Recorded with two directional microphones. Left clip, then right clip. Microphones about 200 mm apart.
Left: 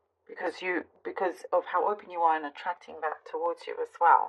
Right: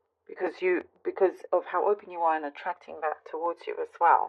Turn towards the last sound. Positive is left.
turn(degrees=-45)  # may be behind; listen again after turning